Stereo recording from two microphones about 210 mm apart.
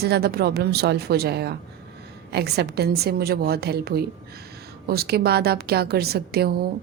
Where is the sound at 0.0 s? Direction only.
50° right (ahead or behind).